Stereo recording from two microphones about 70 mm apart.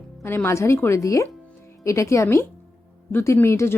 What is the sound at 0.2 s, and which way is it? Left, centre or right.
A woman's voice, left.